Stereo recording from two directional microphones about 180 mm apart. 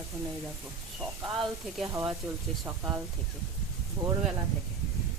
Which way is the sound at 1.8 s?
15° right (ahead or behind).